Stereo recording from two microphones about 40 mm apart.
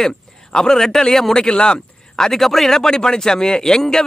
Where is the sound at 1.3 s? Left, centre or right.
Left.